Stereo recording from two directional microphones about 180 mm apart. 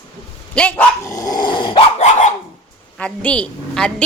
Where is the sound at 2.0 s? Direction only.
40° left (ahead or behind).